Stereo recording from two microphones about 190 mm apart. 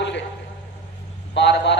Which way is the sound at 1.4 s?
65° left (ahead or behind).